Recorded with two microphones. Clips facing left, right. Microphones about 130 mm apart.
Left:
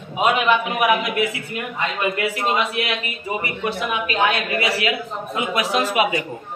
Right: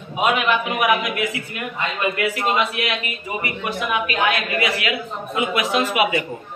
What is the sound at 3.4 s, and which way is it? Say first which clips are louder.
Speech: even; 30° left (ahead or behind).